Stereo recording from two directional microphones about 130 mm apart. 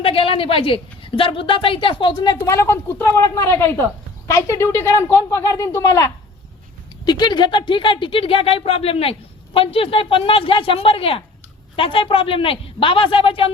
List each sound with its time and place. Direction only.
0.0 s a woman's voice: 45° left (ahead or behind)
2.5 s a woman's voice: 20° left (ahead or behind); by 13.5 s 45° left (ahead or behind)